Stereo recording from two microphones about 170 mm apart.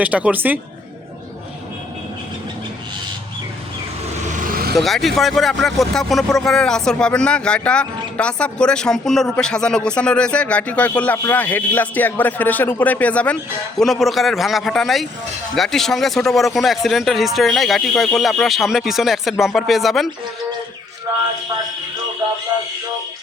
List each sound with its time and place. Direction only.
0.0 s speech: 10° right (ahead or behind)
4.3 s vehicle: 50° right (ahead or behind)
4.7 s speech: centre (ahead or behind)